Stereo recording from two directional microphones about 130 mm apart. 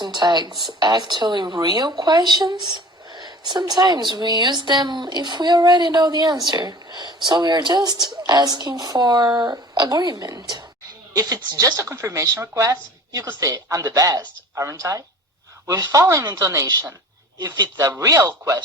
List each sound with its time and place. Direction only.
0.0 s a woman's voice: 35° right (ahead or behind)